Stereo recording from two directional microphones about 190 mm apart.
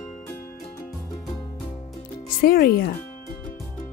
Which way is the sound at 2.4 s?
50° left (ahead or behind).